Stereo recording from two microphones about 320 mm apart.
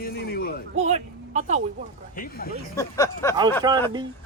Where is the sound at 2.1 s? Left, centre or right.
Left.